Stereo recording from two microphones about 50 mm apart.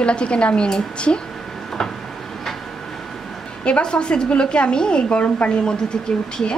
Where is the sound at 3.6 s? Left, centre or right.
Centre.